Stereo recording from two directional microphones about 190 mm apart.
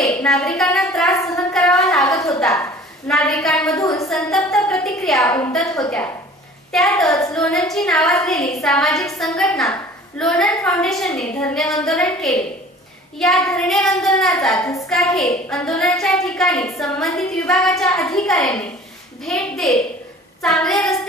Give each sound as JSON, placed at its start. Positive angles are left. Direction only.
{"t": 0.1, "sound": "a woman's voice", "side_deg": 5}
{"t": 1.1, "sound": "speech", "side_deg": 15}
{"t": 1.5, "sound": "a sound", "side_deg": 0}
{"t": 3.1, "sound": "a woman's voice", "side_deg": 5}
{"t": 3.7, "sound": "a woman's voice", "side_deg": 15}
{"t": 4.1, "sound": "a woman's voice", "side_deg": 0}